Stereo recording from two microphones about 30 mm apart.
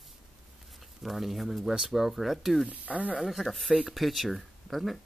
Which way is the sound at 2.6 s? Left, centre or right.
Right.